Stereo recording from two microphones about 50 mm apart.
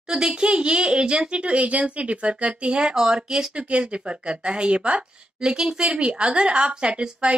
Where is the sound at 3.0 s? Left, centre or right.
Centre.